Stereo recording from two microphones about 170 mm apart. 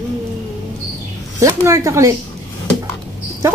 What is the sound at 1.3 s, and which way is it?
Speech, 20° right (ahead or behind).